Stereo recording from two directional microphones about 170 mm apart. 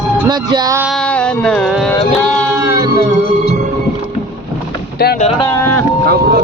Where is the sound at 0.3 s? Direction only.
25° right (ahead or behind).